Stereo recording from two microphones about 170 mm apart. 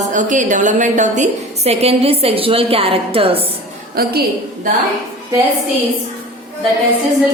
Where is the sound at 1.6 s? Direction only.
35° right (ahead or behind).